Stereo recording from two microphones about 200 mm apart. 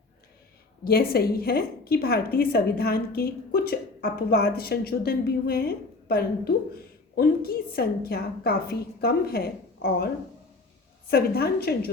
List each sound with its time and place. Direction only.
0.9 s a woman's voice: 50° left (ahead or behind)
11.1 s a woman's voice: 50° left (ahead or behind)